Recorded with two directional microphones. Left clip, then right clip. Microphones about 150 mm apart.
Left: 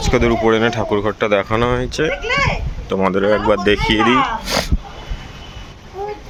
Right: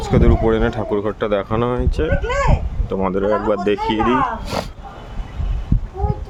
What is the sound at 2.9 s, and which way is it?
Speech, centre (ahead or behind).